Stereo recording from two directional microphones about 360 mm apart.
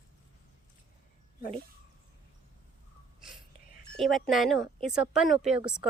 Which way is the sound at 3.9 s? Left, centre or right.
Centre.